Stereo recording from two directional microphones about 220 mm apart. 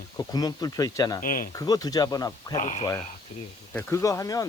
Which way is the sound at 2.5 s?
35° left (ahead or behind).